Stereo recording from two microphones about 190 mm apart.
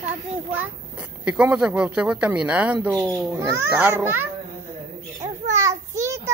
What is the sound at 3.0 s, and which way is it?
A man's voice, 20° right (ahead or behind).